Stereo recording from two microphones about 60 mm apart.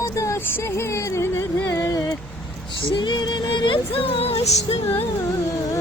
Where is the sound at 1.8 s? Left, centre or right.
Left.